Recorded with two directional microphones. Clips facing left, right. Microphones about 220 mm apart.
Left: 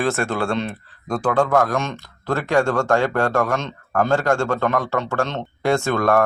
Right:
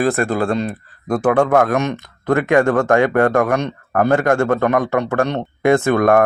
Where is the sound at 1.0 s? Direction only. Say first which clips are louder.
Right 4 dB; 20° right (ahead or behind).